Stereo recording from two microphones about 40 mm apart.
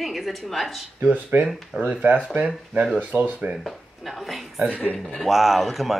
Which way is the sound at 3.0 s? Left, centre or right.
Right.